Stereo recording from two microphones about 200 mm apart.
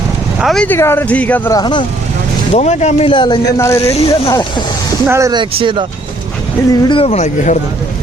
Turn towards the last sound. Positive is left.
turn(degrees=35)  # may be behind; listen again after turning